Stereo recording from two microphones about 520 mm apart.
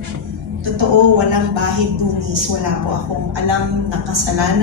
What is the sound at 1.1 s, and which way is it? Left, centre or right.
A woman's voice, right.